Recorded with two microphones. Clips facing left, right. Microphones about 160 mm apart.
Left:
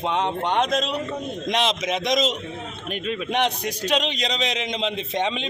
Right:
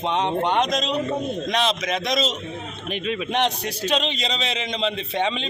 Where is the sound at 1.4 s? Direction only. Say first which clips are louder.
Left 4 dB; 20° left (ahead or behind).